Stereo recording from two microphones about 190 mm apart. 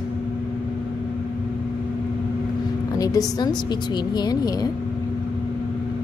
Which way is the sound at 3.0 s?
20° left (ahead or behind).